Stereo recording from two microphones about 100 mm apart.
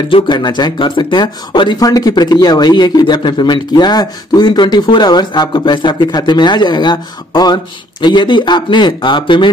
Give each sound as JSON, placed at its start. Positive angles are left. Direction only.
{"t": 0.1, "sound": "speech", "side_deg": 50}
{"t": 1.8, "sound": "speech", "side_deg": 40}